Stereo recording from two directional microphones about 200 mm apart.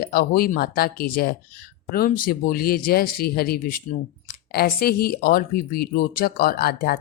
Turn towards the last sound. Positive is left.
turn(degrees=50)  # may be behind; listen again after turning